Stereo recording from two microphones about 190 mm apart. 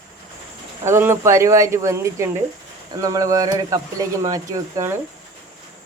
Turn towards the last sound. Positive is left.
turn(degrees=-15)  # may be behind; listen again after turning